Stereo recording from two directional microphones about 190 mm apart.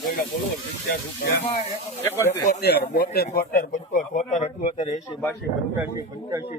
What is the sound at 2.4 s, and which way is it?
Speech, 55° left (ahead or behind).